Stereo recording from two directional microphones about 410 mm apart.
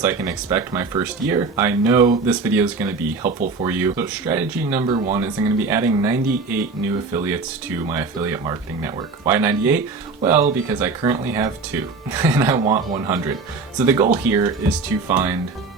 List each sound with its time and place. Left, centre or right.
0.0 s speech: centre
3.2 s speech: centre
3.7 s speech: centre
12.6 s speech: centre
13.7 s speech: centre